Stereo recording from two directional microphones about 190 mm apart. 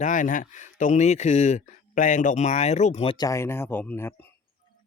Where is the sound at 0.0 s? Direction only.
40° left (ahead or behind).